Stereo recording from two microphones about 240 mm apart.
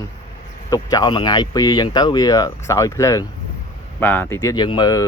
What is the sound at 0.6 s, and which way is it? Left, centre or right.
Speech, centre.